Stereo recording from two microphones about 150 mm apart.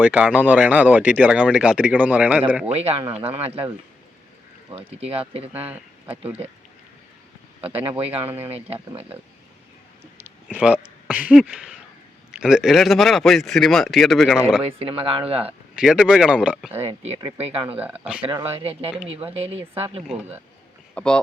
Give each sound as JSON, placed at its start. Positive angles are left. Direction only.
{"t": 0.0, "sound": "speech", "side_deg": -10}
{"t": 2.6, "sound": "speech", "side_deg": -45}
{"t": 4.9, "sound": "speech", "side_deg": -40}
{"t": 5.5, "sound": "speech", "side_deg": -10}
{"t": 7.6, "sound": "speech", "side_deg": -40}
{"t": 10.2, "sound": "speech", "side_deg": -10}
{"t": 14.7, "sound": "speech", "side_deg": -40}
{"t": 15.7, "sound": "speech", "side_deg": -5}
{"t": 17.3, "sound": "speech", "side_deg": -40}
{"t": 17.7, "sound": "speech", "side_deg": -10}
{"t": 18.2, "sound": "speech", "side_deg": -30}
{"t": 19.0, "sound": "speech", "side_deg": -40}
{"t": 20.0, "sound": "speech", "side_deg": -5}
{"t": 20.9, "sound": "speech", "side_deg": 5}